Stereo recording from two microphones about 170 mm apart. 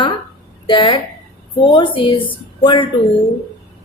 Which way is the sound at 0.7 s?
30° left (ahead or behind).